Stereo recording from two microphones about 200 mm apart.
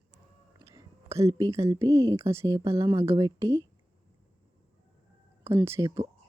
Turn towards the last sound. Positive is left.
turn(degrees=-15)  # may be behind; listen again after turning